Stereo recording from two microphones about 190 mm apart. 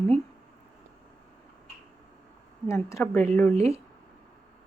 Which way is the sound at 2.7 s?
15° left (ahead or behind).